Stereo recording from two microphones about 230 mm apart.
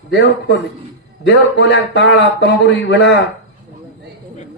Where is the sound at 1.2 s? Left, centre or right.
Left.